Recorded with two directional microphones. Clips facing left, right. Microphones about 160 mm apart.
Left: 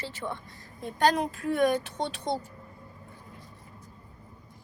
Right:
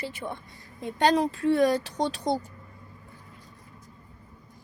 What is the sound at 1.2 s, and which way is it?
Speech, 30° right (ahead or behind).